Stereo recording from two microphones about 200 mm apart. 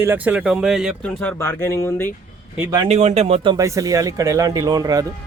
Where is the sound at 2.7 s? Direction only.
30° right (ahead or behind).